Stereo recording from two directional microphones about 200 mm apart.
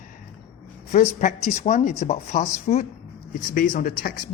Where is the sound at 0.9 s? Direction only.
40° left (ahead or behind).